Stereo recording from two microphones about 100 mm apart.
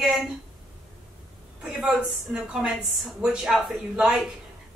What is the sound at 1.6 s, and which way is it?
Speech, 5° right (ahead or behind).